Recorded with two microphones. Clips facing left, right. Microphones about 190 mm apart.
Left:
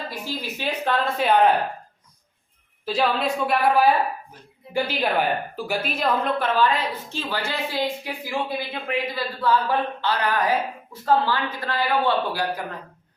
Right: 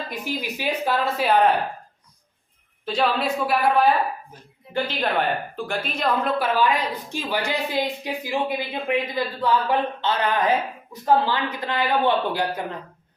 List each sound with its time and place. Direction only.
0.1 s a woman's voice: 15° right (ahead or behind)
2.8 s a woman's voice: centre (ahead or behind); by 12.7 s 20° right (ahead or behind)